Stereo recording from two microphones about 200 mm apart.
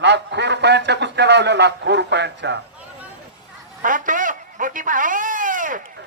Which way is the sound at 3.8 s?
40° right (ahead or behind).